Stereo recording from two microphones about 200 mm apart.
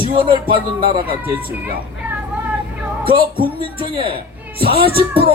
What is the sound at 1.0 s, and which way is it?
Speech, 10° right (ahead or behind).